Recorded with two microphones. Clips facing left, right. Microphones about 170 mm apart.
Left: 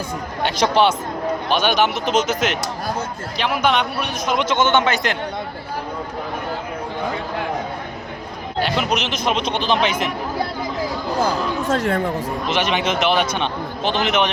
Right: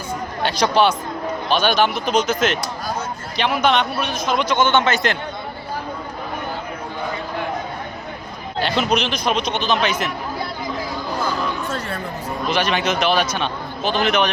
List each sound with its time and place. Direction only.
0.4 s a man's voice: 20° left (ahead or behind)
3.3 s a man's voice: 5° left (ahead or behind)
8.5 s a man's voice: 10° left (ahead or behind); by 10.1 s 25° left (ahead or behind)
11.7 s speech: 90° left
12.5 s a man's voice: 20° left (ahead or behind)